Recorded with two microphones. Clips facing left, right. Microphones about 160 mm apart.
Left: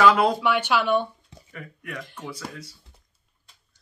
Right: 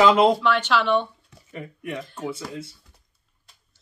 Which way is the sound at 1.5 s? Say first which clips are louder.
Right 5 dB; 25° right (ahead or behind).